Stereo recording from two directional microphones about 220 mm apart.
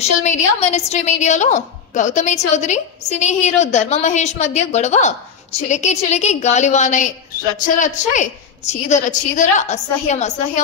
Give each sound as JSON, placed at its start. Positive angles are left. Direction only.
{"t": 0.0, "sound": "a woman's voice", "side_deg": 30}